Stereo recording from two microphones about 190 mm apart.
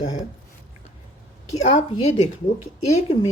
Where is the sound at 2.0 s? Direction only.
35° left (ahead or behind).